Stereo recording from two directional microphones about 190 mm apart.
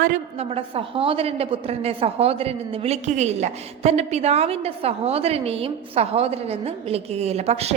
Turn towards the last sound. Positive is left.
turn(degrees=-35)  # may be behind; listen again after turning